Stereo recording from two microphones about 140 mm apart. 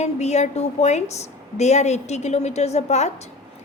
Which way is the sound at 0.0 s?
55° left (ahead or behind).